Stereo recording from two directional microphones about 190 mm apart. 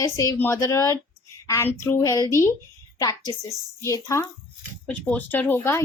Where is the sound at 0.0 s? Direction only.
15° left (ahead or behind).